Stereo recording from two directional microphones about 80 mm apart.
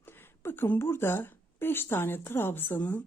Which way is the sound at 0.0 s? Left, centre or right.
Left.